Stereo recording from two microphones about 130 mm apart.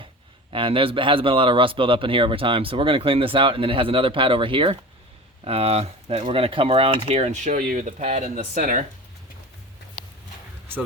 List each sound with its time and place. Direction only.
0.5 s speech: 40° right (ahead or behind); by 8.8 s 70° right (ahead or behind)